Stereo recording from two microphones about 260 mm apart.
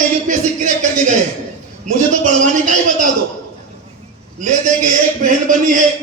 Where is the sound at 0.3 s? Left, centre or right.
Right.